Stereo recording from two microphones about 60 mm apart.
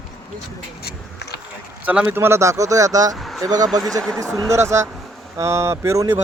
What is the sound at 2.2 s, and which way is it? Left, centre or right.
Speech, right.